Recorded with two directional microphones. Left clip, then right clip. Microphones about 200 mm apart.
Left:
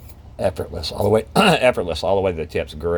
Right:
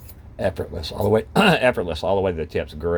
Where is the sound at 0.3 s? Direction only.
Centre (ahead or behind).